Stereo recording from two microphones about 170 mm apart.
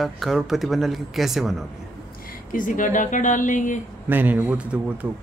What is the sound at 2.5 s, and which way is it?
Speech, 50° left (ahead or behind).